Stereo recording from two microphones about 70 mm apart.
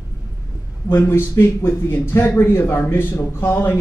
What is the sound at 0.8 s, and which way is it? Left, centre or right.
A man's voice, left.